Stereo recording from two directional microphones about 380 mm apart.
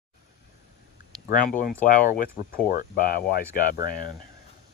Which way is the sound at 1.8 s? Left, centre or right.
Left.